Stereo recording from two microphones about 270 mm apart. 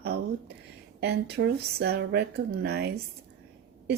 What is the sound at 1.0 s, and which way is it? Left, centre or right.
A woman's voice, right.